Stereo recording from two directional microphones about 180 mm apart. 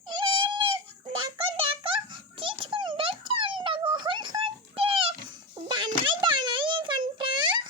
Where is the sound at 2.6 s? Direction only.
30° right (ahead or behind).